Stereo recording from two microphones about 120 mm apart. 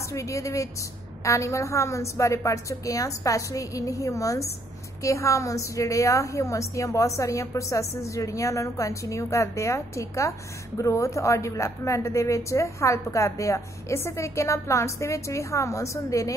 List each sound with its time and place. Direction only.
0.0 s speech: 25° left (ahead or behind)